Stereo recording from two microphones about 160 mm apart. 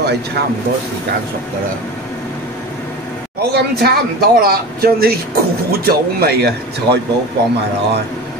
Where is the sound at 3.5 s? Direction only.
80° right.